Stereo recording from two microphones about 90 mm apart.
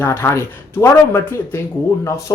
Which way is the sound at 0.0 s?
25° left (ahead or behind).